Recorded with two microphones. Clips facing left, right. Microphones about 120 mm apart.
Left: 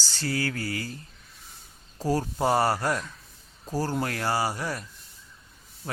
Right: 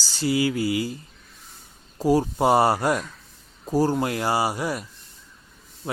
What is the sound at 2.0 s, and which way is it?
Speech, 15° right (ahead or behind).